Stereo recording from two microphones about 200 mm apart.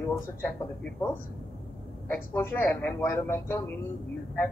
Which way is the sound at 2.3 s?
10° left (ahead or behind).